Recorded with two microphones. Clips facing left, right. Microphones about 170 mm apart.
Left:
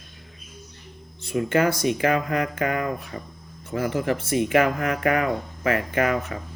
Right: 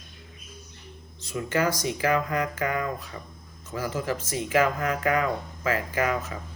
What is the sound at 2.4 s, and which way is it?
Speech, 60° left (ahead or behind).